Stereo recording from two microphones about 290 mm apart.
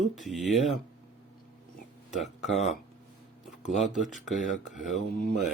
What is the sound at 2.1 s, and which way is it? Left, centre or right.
Speech, centre.